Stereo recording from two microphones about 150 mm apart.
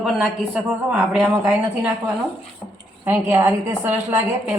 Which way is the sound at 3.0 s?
20° right (ahead or behind).